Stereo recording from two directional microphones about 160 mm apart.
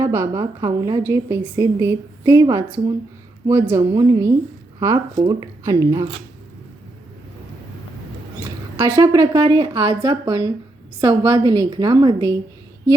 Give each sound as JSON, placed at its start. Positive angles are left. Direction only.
{"t": 0.0, "sound": "a woman's voice", "side_deg": -20}
{"t": 8.7, "sound": "a woman's voice", "side_deg": -25}